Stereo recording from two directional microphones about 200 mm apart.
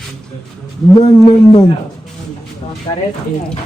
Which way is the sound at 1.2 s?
25° left (ahead or behind).